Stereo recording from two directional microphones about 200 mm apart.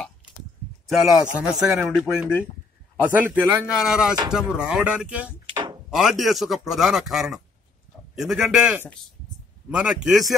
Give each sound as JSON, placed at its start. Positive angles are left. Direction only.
{"t": 0.8, "sound": "speech", "side_deg": 0}
{"t": 5.5, "sound": "a sound", "side_deg": -25}
{"t": 5.9, "sound": "speech", "side_deg": 0}